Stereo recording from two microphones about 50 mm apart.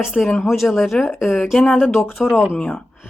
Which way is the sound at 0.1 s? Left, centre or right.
Centre.